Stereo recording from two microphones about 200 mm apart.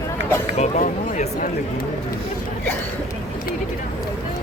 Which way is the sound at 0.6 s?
35° left (ahead or behind).